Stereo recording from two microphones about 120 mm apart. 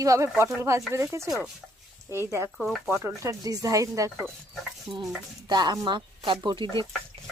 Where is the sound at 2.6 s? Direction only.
Centre (ahead or behind).